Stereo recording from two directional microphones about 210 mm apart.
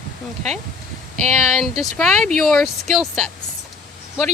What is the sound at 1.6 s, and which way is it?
Speech, centre (ahead or behind).